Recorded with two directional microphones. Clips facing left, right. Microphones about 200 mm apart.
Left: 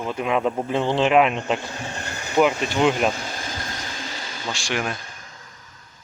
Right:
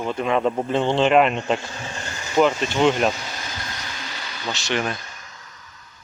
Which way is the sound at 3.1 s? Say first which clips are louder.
Left 2 dB; 50° left (ahead or behind).